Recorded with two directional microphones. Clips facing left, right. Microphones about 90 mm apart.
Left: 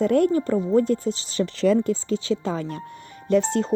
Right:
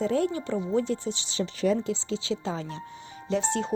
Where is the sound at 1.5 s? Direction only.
90° left.